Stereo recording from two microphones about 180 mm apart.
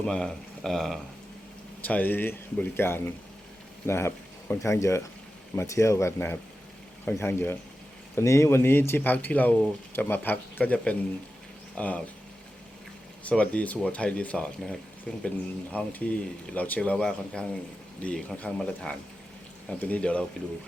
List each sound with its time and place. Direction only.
0.0 s speech: 5° left (ahead or behind)
13.2 s speech: 5° left (ahead or behind)